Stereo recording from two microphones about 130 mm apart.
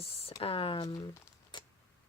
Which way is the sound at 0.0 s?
50° left (ahead or behind).